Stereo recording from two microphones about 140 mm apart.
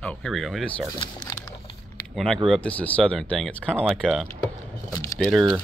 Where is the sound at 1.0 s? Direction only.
30° left (ahead or behind).